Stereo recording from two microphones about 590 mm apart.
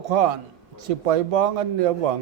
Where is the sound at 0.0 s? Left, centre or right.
Right.